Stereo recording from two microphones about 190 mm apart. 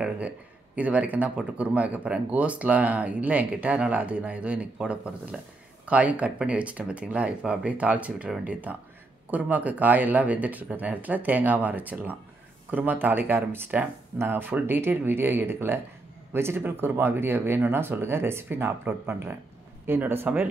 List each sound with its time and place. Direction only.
0.7 s speech: 10° right (ahead or behind)